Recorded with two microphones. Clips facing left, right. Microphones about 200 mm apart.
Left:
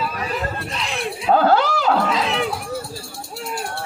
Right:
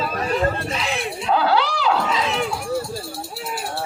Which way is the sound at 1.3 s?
45° left (ahead or behind).